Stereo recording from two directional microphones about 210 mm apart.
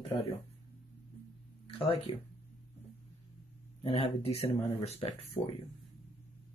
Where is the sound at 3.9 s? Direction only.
25° left (ahead or behind).